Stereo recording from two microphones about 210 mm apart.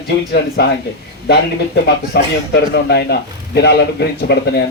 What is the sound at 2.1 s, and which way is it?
Speech, 50° left (ahead or behind).